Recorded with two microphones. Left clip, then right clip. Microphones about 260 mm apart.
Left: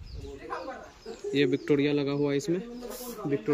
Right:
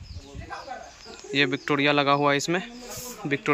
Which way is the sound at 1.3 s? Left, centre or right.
Centre.